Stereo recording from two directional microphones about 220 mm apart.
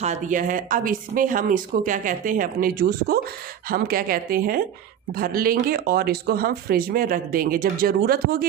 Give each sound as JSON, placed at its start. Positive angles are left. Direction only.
{"t": 0.0, "sound": "speech", "side_deg": -35}